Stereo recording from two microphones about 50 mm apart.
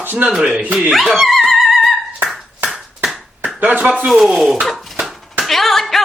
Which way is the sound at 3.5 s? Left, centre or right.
Right.